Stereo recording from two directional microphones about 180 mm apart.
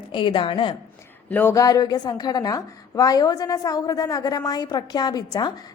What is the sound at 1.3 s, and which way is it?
A woman's voice, 10° left (ahead or behind).